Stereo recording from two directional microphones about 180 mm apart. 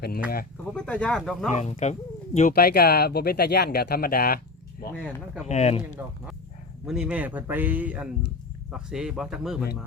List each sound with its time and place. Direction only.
0.7 s speech: 5° left (ahead or behind)
1.5 s speech: 40° left (ahead or behind)
2.5 s speech: 60° left (ahead or behind)
4.9 s speech: centre (ahead or behind)
5.5 s speech: 35° left (ahead or behind)
6.8 s speech: 5° right (ahead or behind)